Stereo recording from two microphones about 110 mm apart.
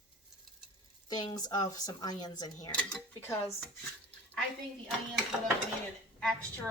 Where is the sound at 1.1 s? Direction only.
35° left (ahead or behind).